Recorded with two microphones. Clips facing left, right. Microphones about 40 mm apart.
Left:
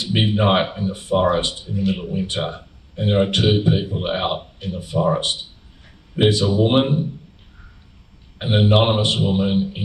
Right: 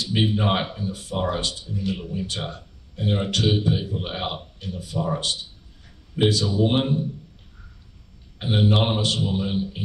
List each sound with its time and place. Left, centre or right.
0.0 s speech: left
8.4 s speech: left